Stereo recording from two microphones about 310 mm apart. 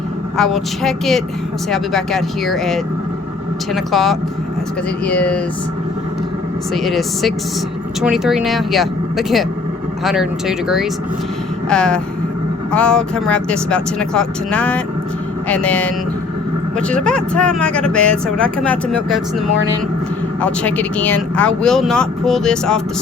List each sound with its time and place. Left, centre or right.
0.3 s speech: centre
6.7 s speech: centre
20.4 s speech: centre